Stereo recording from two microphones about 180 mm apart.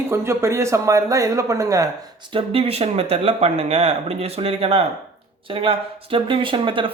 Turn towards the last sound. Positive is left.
turn(degrees=-30)  # may be behind; listen again after turning